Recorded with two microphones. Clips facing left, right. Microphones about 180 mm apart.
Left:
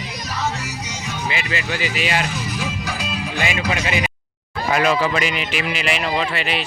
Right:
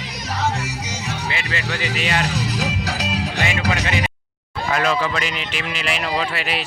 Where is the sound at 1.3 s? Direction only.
10° left (ahead or behind).